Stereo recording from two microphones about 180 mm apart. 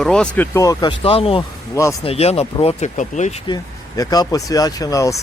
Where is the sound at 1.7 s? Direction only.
15° left (ahead or behind).